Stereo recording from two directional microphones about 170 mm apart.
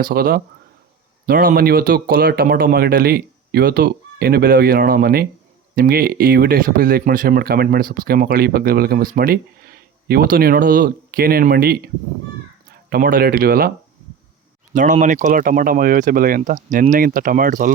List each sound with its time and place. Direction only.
0.0 s speech: 60° right (ahead or behind)
12.9 s speech: 55° right (ahead or behind)
14.7 s speech: 50° right (ahead or behind)